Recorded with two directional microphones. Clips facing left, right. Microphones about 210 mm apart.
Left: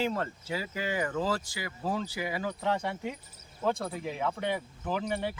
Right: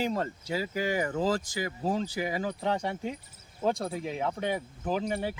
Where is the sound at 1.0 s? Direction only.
20° right (ahead or behind).